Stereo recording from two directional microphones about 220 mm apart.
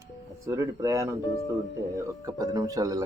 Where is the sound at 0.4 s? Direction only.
15° right (ahead or behind).